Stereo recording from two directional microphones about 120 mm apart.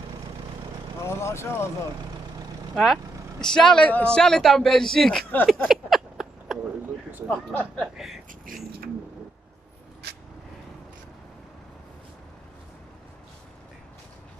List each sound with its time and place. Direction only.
1.0 s speech: 20° left (ahead or behind)
2.7 s speech: 5° left (ahead or behind)
5.5 s a sound: centre (ahead or behind)
7.2 s speech: 5° left (ahead or behind)